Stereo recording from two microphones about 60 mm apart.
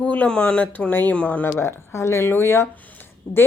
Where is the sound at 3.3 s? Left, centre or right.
Centre.